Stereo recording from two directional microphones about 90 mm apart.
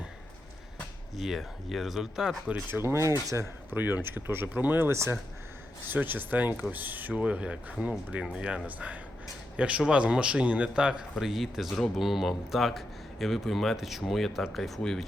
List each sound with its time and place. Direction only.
1.1 s speech: centre (ahead or behind)
2.6 s speech: 25° right (ahead or behind)
3.7 s speech: 20° right (ahead or behind)
5.9 s speech: 20° right (ahead or behind); by 15.0 s 5° left (ahead or behind)